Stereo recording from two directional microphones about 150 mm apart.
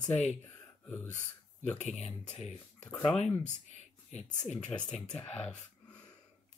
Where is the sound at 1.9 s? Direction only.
50° left (ahead or behind).